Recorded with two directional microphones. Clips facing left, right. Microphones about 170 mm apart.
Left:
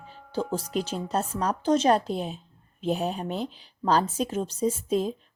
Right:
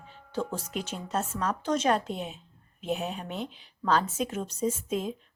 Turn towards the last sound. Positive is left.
turn(degrees=35)  # may be behind; listen again after turning